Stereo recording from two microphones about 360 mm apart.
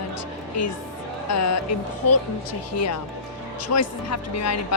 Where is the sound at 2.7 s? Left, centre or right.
Left.